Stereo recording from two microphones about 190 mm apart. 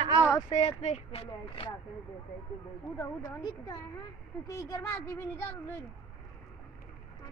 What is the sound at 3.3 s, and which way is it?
Speech, 20° left (ahead or behind).